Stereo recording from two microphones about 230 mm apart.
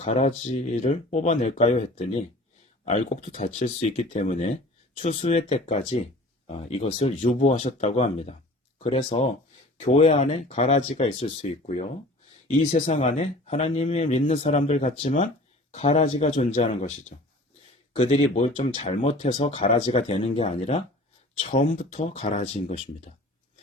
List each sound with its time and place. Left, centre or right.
0.0 s speech: left